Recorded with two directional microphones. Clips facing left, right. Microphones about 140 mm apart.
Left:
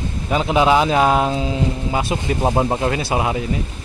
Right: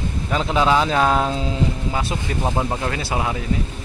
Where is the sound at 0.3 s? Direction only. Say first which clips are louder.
Left 3 dB; 15° left (ahead or behind).